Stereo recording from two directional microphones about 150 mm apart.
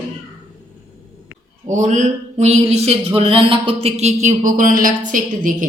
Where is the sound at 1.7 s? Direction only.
55° right (ahead or behind).